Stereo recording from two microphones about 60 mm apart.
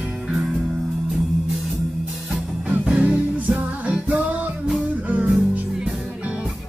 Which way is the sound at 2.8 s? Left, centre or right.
Centre.